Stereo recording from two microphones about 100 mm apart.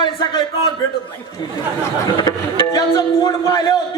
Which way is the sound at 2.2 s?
45° left (ahead or behind).